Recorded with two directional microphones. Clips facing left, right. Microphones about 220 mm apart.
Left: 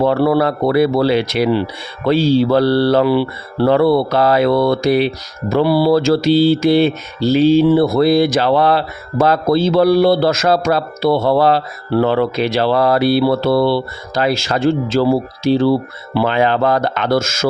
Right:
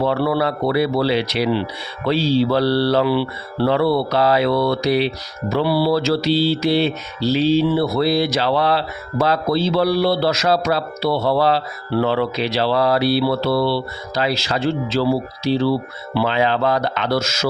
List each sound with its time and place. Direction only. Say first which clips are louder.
0.0 s mantra: left 5 dB; 50° left (ahead or behind)